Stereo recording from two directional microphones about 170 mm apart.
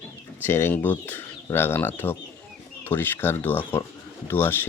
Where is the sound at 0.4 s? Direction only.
15° left (ahead or behind).